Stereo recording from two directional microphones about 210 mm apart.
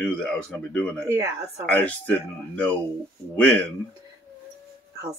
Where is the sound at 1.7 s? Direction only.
5° left (ahead or behind).